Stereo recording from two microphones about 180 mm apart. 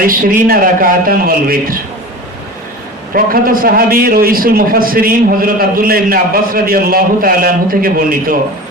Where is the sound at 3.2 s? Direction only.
50° right (ahead or behind).